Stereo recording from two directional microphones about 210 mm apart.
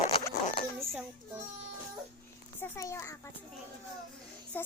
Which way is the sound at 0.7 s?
10° right (ahead or behind).